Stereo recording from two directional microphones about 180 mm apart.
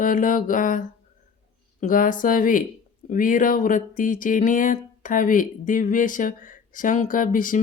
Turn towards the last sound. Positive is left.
turn(degrees=50)  # may be behind; listen again after turning